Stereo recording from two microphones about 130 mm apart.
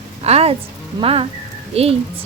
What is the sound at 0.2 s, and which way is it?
Music, 55° right (ahead or behind).